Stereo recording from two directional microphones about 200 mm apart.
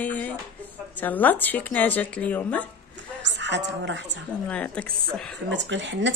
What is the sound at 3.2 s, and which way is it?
Speech, 65° right (ahead or behind).